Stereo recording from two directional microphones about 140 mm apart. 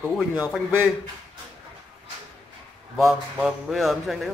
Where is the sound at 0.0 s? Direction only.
25° left (ahead or behind).